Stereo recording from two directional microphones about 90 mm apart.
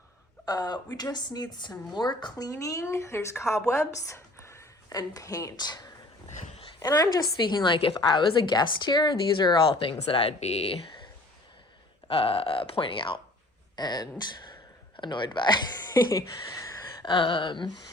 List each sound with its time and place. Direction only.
0.4 s speech: 50° left (ahead or behind)
2.5 s a woman's voice: 40° left (ahead or behind)
3.7 s a sound: 35° left (ahead or behind)
4.9 s speech: 40° left (ahead or behind); by 8.0 s 80° left
8.0 s speech: 60° left (ahead or behind)
9.7 s speech: 85° left
13.7 s speech: 50° left (ahead or behind)
17.1 s speech: 65° left (ahead or behind)